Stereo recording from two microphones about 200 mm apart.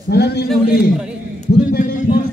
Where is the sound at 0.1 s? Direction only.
55° left (ahead or behind).